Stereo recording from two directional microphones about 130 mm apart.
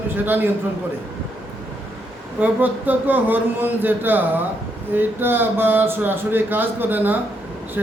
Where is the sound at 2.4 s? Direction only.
15° right (ahead or behind).